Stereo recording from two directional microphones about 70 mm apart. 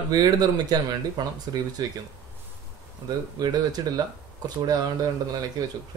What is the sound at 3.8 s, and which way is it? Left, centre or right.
Speech, right.